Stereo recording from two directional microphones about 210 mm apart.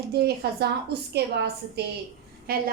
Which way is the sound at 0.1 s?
50° right (ahead or behind).